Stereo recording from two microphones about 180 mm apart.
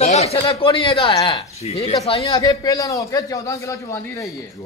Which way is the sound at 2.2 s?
20° left (ahead or behind).